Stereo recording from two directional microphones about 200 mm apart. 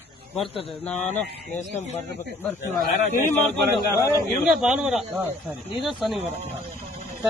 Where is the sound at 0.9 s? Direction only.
35° left (ahead or behind).